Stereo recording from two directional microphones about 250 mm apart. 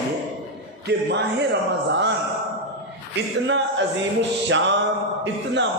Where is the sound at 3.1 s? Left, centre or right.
Right.